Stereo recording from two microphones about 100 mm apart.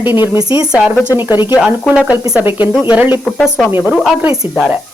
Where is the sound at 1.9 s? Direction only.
10° right (ahead or behind).